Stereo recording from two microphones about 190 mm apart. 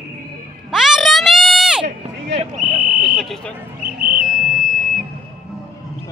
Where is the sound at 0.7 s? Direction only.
Centre (ahead or behind).